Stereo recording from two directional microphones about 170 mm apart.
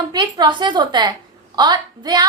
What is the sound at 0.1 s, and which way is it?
A woman's voice, 25° right (ahead or behind).